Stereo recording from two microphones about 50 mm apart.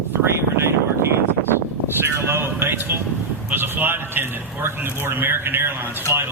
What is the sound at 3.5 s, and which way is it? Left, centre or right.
A man's voice, right.